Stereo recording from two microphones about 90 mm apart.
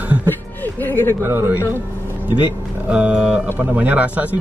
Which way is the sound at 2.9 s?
15° right (ahead or behind).